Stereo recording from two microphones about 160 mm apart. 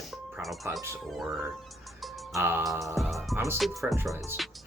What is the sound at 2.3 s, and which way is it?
Speech, 15° right (ahead or behind).